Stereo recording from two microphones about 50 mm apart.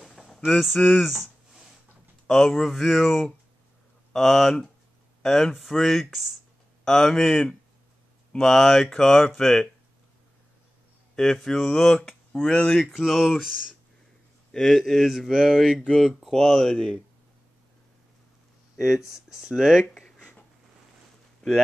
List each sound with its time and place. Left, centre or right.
0.0 s a sound: centre
0.5 s speech: centre
2.2 s speech: centre
11.4 s speech: centre
12.4 s speech: left
12.9 s speech: centre
14.5 s speech: centre
15.3 s speech: centre
16.3 s speech: centre
16.7 s speech: centre
19.0 s speech: centre
19.9 s a sound: centre
21.4 s a sound: centre